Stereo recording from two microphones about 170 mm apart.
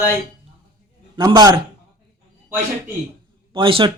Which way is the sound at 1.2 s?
25° right (ahead or behind).